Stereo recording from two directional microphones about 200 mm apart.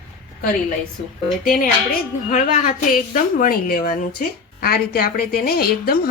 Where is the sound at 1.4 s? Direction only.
45° left (ahead or behind).